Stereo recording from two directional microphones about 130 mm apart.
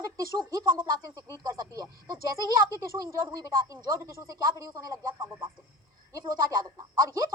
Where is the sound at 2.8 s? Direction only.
20° right (ahead or behind).